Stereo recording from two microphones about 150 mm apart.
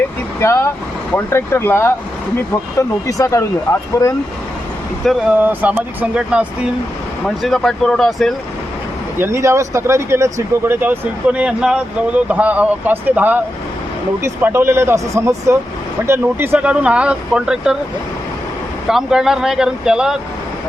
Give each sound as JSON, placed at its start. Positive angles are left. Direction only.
{"t": 0.3, "sound": "speech", "side_deg": 15}
{"t": 3.1, "sound": "speech", "side_deg": 20}
{"t": 5.0, "sound": "speech", "side_deg": 0}
{"t": 5.4, "sound": "speech", "side_deg": -10}
{"t": 7.3, "sound": "speech", "side_deg": 0}
{"t": 9.1, "sound": "speech", "side_deg": -15}
{"t": 18.9, "sound": "speech", "side_deg": -5}